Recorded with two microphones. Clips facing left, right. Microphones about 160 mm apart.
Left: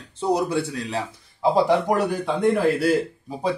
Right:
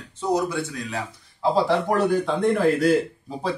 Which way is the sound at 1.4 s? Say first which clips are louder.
Left 2 dB; 15° left (ahead or behind).